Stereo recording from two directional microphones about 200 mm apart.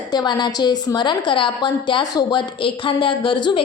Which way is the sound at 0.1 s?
20° left (ahead or behind).